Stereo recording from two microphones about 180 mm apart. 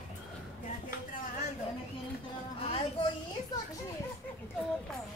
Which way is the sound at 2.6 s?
30° left (ahead or behind).